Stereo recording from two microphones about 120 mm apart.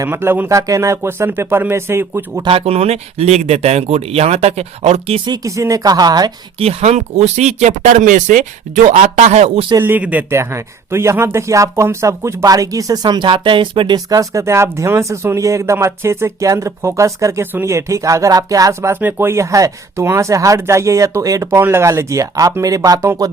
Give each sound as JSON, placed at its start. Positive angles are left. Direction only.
{"t": 0.0, "sound": "speech", "side_deg": -20}
{"t": 2.4, "sound": "speech", "side_deg": -50}
{"t": 5.2, "sound": "speech", "side_deg": -30}
{"t": 6.6, "sound": "speech", "side_deg": -60}
{"t": 9.8, "sound": "speech", "side_deg": -15}